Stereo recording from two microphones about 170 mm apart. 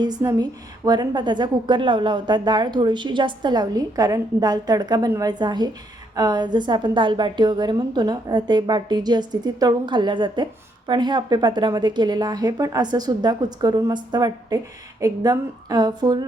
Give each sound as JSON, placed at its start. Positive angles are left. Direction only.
{"t": 0.0, "sound": "a woman's voice", "side_deg": -25}